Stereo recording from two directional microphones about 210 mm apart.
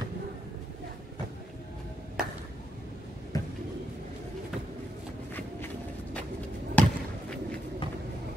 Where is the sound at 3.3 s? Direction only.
15° left (ahead or behind).